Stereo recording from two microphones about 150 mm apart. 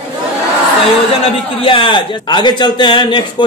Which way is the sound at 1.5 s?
35° left (ahead or behind).